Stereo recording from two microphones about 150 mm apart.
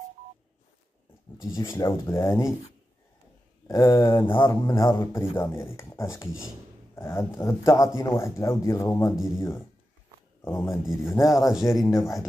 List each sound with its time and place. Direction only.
1.4 s speech: 20° left (ahead or behind)
3.6 s speech: 20° left (ahead or behind)
9.1 s speech: 5° right (ahead or behind)
10.4 s speech: 15° left (ahead or behind)
11.3 s speech: 5° right (ahead or behind)
11.8 s speech: 20° left (ahead or behind)